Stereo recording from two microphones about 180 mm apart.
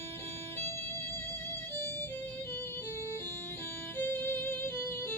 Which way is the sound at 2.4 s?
15° left (ahead or behind).